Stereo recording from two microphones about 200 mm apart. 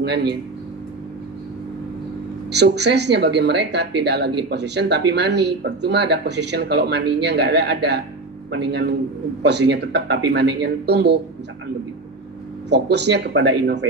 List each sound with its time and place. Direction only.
0.0 s a woman's voice: 55° right (ahead or behind)
2.5 s a woman's voice: 55° right (ahead or behind)
12.6 s a woman's voice: 60° right (ahead or behind)